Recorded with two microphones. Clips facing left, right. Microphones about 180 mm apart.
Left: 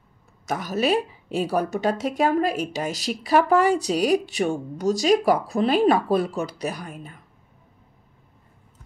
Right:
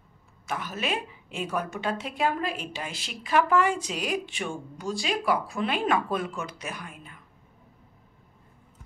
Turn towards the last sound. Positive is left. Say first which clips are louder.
# left 5 dB
turn(degrees=40)  # may be behind; listen again after turning